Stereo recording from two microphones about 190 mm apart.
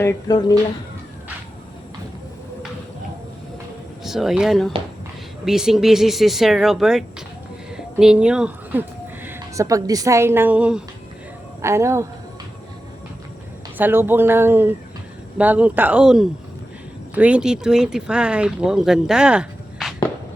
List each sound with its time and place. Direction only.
0.0 s speech: 15° left (ahead or behind)
4.0 s speech: centre (ahead or behind)
13.7 s speech: 10° right (ahead or behind)